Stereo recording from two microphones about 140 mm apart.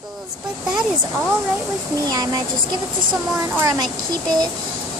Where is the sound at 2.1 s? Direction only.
30° right (ahead or behind).